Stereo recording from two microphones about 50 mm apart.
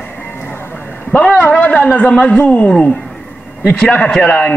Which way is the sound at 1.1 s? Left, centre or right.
Left.